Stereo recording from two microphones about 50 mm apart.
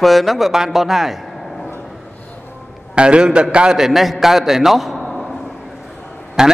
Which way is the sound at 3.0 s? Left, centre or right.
Centre.